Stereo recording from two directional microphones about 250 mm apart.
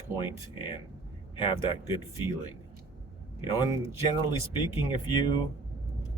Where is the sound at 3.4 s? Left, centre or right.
Centre.